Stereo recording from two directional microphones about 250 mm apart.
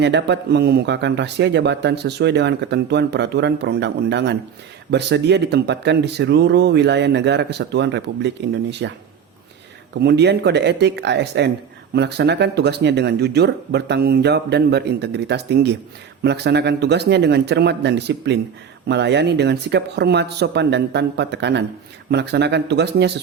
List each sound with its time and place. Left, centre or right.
0.0 s speech: right
9.9 s speech: right